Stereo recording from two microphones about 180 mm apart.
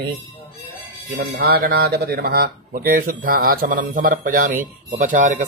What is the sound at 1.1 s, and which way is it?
Speech, 60° right (ahead or behind).